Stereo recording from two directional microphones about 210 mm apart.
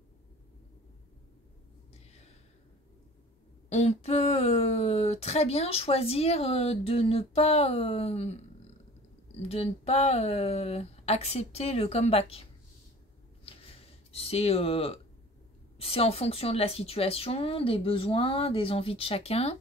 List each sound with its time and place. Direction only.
3.6 s speech: 30° left (ahead or behind)
9.4 s speech: 30° left (ahead or behind)
13.5 s a sound: 25° left (ahead or behind)
14.1 s speech: 30° left (ahead or behind)